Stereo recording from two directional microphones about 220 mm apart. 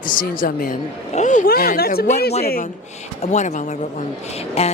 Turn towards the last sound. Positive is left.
turn(degrees=30)  # may be behind; listen again after turning